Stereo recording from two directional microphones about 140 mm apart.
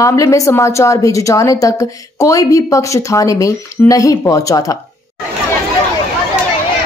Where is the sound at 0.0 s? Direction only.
20° left (ahead or behind).